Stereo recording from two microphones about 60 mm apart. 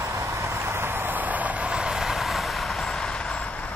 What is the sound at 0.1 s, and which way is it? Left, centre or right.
Vehicle, right.